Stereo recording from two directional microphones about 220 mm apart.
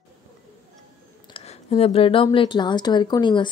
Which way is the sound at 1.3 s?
30° left (ahead or behind).